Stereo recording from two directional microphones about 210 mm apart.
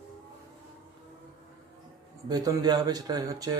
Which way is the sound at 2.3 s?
20° right (ahead or behind).